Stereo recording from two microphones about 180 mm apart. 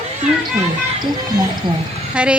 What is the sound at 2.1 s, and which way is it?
Speech, 5° right (ahead or behind).